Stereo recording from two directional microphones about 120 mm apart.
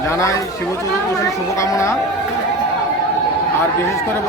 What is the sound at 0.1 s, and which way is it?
Speech, 25° left (ahead or behind).